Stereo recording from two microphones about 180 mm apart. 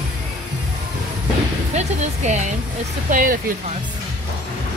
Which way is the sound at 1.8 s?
40° right (ahead or behind).